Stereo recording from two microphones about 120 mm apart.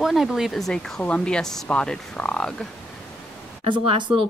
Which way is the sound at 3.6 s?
50° right (ahead or behind).